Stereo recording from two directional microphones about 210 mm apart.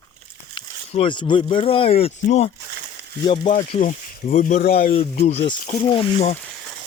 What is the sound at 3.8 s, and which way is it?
Speech, 40° left (ahead or behind).